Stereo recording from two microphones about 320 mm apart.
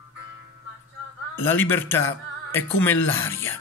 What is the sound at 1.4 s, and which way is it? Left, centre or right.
Speech, centre.